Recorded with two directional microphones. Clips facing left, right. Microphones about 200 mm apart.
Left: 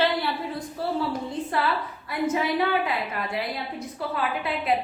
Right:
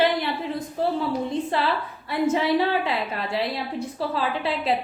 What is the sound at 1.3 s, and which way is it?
A woman's voice, 25° right (ahead or behind).